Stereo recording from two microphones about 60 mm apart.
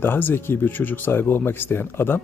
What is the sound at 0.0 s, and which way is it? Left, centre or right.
Speech, left.